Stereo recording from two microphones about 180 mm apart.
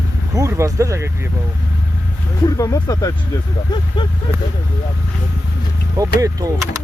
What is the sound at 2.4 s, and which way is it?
Speech, 20° left (ahead or behind).